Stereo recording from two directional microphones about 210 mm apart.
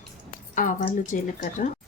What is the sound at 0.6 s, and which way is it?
Speech, 40° left (ahead or behind).